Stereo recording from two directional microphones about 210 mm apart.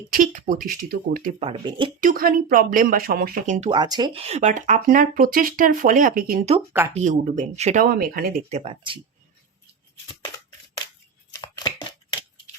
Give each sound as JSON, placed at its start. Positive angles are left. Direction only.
{"t": 0.1, "sound": "speech", "side_deg": -40}
{"t": 2.0, "sound": "speech", "side_deg": -40}
{"t": 3.7, "sound": "speech", "side_deg": -20}
{"t": 8.5, "sound": "speech", "side_deg": -25}
{"t": 11.3, "sound": "chopping", "side_deg": 20}